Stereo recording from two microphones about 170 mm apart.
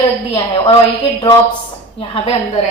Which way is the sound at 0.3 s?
30° left (ahead or behind).